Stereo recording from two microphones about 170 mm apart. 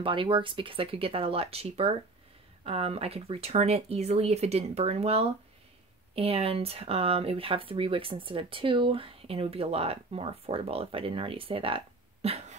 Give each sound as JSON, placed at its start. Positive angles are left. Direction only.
{"t": 0.0, "sound": "speech", "side_deg": -30}